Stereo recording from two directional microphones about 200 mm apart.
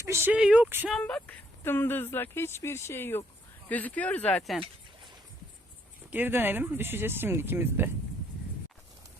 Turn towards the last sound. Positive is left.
turn(degrees=-10)  # may be behind; listen again after turning